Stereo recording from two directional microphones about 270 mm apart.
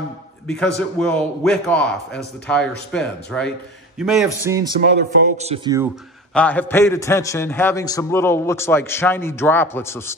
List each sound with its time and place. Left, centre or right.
0.5 s a man's voice: centre
4.5 s speech: centre
6.3 s a man's voice: centre